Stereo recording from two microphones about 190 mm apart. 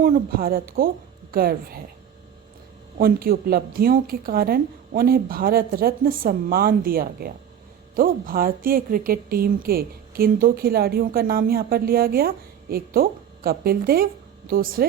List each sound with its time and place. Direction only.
0.0 s a woman's voice: 50° right (ahead or behind)
3.0 s a woman's voice: 50° right (ahead or behind)